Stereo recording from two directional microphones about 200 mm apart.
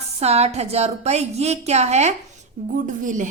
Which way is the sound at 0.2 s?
30° right (ahead or behind).